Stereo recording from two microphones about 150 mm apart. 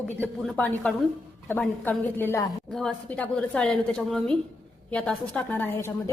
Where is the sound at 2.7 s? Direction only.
5° left (ahead or behind).